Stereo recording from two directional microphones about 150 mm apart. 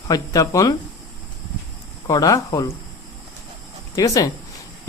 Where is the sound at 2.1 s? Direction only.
25° left (ahead or behind).